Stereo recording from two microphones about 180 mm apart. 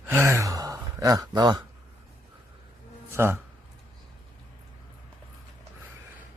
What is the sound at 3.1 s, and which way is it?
Speech, 15° right (ahead or behind).